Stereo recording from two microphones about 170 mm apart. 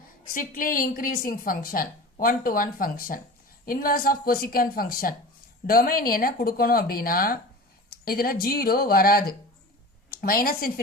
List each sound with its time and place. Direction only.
0.3 s a woman's voice: 55° left (ahead or behind)